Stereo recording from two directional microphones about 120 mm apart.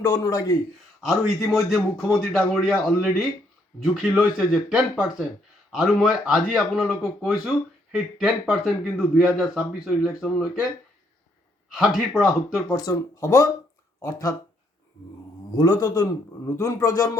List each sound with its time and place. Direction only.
0.0 s speech: 30° left (ahead or behind)
1.0 s speech: centre (ahead or behind)
11.7 s speech: 5° right (ahead or behind)
12.7 s speech: 30° left (ahead or behind)
15.5 s a man's voice: 30° left (ahead or behind)